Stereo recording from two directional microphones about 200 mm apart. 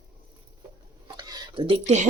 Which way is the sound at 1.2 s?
20° right (ahead or behind).